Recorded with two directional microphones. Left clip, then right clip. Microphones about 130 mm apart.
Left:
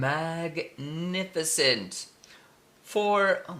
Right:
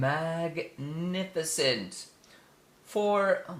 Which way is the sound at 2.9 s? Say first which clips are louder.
Left 2 dB; 35° left (ahead or behind).